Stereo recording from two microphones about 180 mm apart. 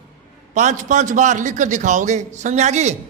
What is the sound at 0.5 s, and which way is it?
A man's voice, 40° right (ahead or behind).